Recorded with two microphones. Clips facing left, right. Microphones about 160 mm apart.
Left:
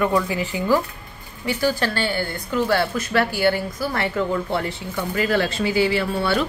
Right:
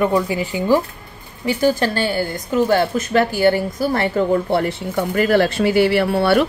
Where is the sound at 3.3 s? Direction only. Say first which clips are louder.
Right 5 dB; 45° right (ahead or behind); by 6.5 s 60° right (ahead or behind).